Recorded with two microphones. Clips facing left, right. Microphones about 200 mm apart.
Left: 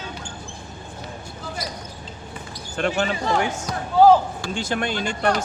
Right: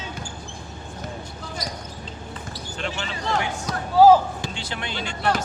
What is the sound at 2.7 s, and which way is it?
Speech, 50° left (ahead or behind).